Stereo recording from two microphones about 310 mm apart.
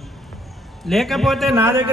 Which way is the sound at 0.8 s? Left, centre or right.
Centre.